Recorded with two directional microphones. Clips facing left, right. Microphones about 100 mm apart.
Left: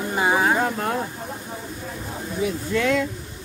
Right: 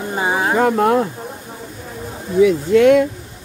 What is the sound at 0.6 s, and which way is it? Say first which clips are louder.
Speech: right 9 dB; 85° right.